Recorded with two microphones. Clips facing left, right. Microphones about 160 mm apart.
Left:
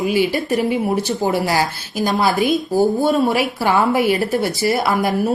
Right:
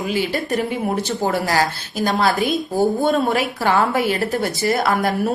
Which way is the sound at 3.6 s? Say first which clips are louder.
Left 2 dB; 15° left (ahead or behind).